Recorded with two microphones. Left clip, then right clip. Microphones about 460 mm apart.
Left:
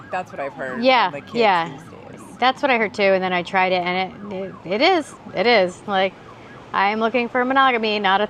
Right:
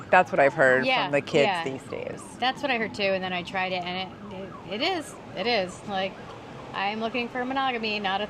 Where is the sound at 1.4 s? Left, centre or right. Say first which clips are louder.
Left 7 dB; left.